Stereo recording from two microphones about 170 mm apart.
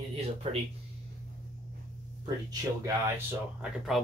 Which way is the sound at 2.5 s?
15° right (ahead or behind).